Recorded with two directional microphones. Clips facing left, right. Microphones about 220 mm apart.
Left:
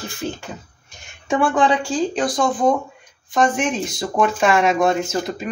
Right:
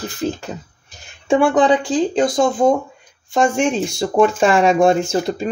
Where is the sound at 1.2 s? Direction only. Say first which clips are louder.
Right 4 dB; 25° right (ahead or behind).